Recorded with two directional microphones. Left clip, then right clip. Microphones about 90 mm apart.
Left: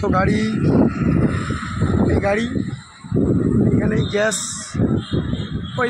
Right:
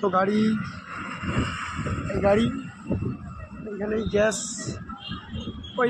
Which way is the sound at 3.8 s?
40° left (ahead or behind).